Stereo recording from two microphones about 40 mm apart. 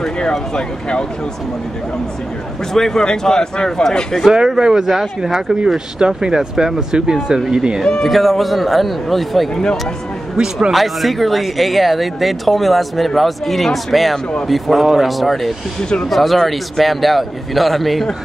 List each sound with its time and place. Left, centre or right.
0.0 s speech: centre
2.7 s a man's voice: centre
4.3 s speech: centre
8.0 s speech: centre
10.3 s speech: centre
10.7 s speech: centre
15.8 s speech: centre
16.1 s speech: centre